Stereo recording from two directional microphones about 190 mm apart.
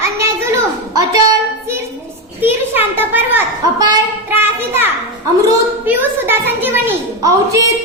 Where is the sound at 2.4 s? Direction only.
10° right (ahead or behind).